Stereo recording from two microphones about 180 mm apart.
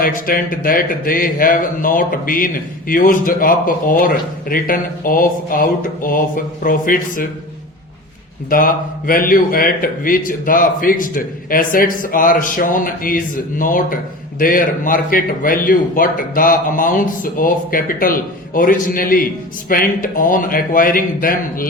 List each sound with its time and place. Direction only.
0.0 s a man's voice: 50° left (ahead or behind)
8.4 s a man's voice: 50° left (ahead or behind)